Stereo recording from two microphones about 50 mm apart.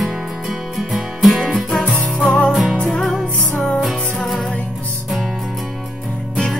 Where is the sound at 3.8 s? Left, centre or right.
Centre.